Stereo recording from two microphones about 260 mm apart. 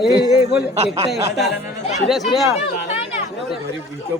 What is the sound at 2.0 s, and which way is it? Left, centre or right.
Speech, centre.